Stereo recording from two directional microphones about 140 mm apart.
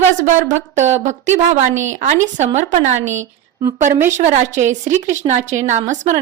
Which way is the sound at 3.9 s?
15° right (ahead or behind).